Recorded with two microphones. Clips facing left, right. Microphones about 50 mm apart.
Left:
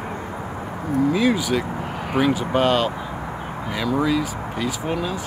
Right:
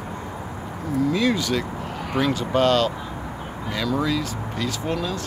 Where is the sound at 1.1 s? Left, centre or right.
Centre.